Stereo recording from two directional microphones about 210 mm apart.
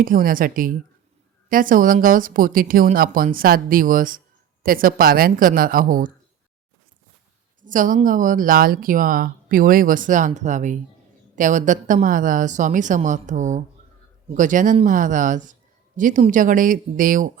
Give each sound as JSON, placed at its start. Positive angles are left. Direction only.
{"t": 0.0, "sound": "a woman's voice", "side_deg": -40}
{"t": 7.6, "sound": "speech", "side_deg": -40}